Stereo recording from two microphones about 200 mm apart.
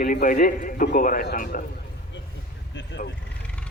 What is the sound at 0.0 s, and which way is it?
A man's voice, 45° left (ahead or behind).